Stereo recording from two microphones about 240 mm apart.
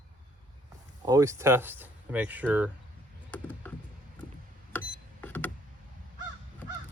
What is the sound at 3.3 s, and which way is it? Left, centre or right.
Computer keyboard, centre.